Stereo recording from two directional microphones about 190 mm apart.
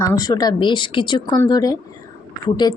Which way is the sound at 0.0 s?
20° left (ahead or behind).